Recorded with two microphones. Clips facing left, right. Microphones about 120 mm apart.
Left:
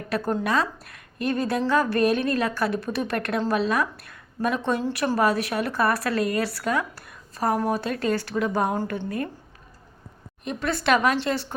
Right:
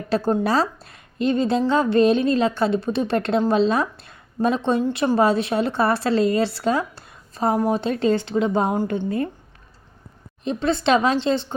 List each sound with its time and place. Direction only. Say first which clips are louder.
0.1 s a woman's voice: right 4 dB; 30° right (ahead or behind)
10.4 s a woman's voice: right 5 dB; 25° right (ahead or behind)